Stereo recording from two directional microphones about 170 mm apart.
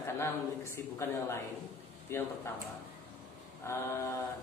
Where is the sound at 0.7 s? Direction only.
15° left (ahead or behind).